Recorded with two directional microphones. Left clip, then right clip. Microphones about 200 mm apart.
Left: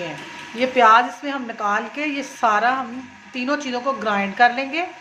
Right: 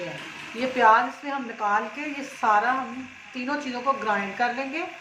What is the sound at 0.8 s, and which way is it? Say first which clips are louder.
A woman's voice: left 5 dB; 35° left (ahead or behind).